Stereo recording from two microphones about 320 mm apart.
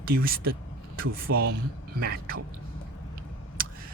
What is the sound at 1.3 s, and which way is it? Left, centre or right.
Speech, right.